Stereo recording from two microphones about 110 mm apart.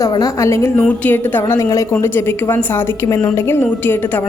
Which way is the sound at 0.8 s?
15° left (ahead or behind).